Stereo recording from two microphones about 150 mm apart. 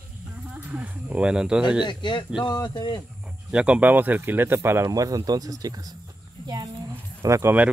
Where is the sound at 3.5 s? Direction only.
5° right (ahead or behind).